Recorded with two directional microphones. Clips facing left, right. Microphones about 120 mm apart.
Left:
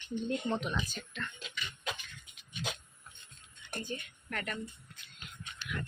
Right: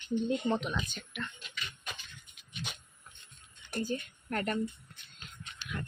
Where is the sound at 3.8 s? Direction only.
40° right (ahead or behind).